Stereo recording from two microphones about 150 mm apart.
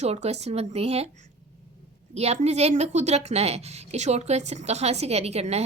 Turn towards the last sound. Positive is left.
turn(degrees=-45)  # may be behind; listen again after turning